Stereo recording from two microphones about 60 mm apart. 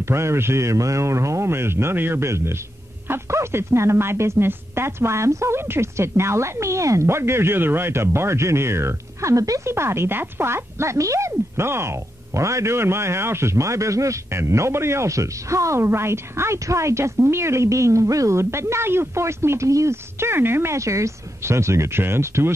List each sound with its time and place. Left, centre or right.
0.0 s speech: right
7.1 s speech: right
9.7 s speech: right
20.7 s speech: right